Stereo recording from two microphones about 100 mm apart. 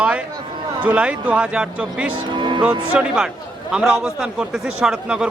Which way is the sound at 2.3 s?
50° right (ahead or behind).